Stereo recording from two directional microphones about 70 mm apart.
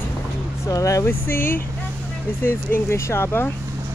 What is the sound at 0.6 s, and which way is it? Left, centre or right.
Speech, left.